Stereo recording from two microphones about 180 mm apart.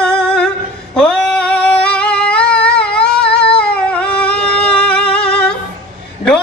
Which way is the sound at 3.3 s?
65° left (ahead or behind).